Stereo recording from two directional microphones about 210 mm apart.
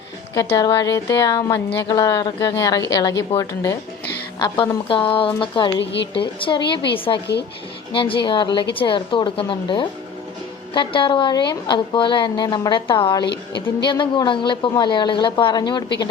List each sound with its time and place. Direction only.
0.3 s a woman's voice: 15° left (ahead or behind)
5.8 s a woman's voice: 55° left (ahead or behind)
6.1 s a woman's voice: 25° left (ahead or behind)